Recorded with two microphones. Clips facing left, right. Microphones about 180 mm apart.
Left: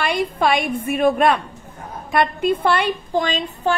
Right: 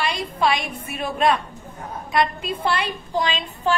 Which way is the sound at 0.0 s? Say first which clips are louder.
Left 3 dB; 55° left (ahead or behind).